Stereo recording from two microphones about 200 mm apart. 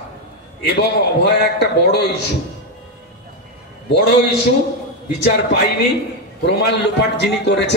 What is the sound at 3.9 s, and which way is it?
Speech, 55° left (ahead or behind).